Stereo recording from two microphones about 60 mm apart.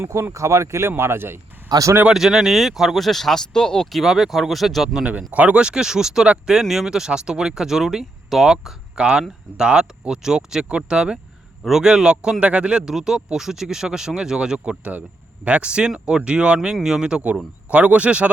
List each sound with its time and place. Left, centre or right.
0.0 s speech: right
2.0 s speech: centre
3.9 s speech: centre
5.3 s speech: right; by 8.7 s centre
9.0 s speech: centre